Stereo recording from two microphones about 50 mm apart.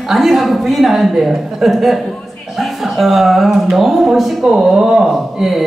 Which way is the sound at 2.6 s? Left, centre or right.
Centre.